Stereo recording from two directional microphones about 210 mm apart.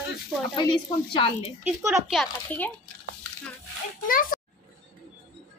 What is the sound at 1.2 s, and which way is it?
Speech, 25° left (ahead or behind).